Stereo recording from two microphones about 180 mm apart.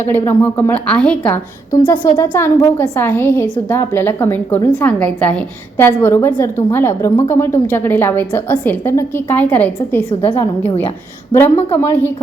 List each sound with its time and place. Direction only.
0.3 s a woman's voice: 10° left (ahead or behind)
10.1 s a woman's voice: 30° left (ahead or behind)
10.3 s a woman's voice: 10° left (ahead or behind)
11.7 s a woman's voice: 10° left (ahead or behind)